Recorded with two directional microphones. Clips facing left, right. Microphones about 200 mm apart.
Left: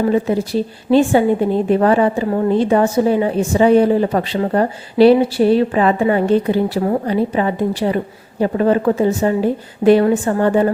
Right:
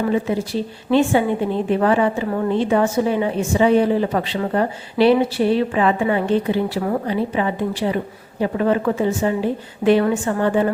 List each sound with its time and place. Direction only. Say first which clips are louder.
0.0 s a woman's voice: left 4 dB; 40° left (ahead or behind)